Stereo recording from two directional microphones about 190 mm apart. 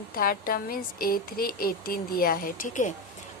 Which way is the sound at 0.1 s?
50° left (ahead or behind).